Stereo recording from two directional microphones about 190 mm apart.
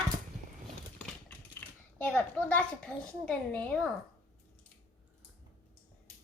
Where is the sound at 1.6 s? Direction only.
5° left (ahead or behind).